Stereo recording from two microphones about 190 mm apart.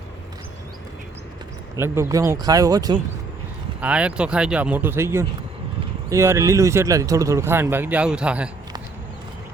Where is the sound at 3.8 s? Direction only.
5° right (ahead or behind).